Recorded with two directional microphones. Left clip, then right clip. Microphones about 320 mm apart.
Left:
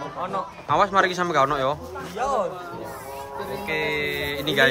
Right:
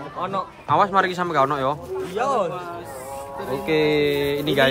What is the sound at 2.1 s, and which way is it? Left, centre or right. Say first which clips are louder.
Speech: right 2 dB; right.